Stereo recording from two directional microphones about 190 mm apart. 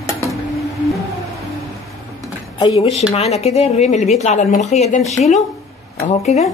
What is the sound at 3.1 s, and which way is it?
Speech, 35° left (ahead or behind).